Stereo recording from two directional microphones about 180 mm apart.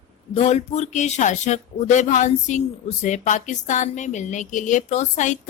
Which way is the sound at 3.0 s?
45° left (ahead or behind).